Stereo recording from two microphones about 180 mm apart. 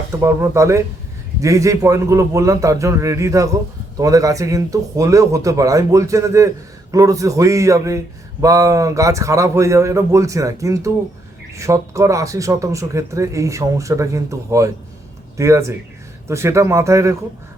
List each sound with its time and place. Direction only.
0.1 s a man's voice: 15° right (ahead or behind)